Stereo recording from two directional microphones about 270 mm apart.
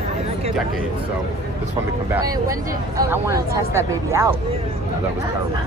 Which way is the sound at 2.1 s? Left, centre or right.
Centre.